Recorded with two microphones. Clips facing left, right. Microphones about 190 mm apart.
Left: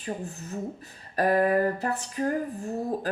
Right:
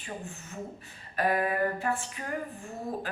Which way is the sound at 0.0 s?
40° left (ahead or behind).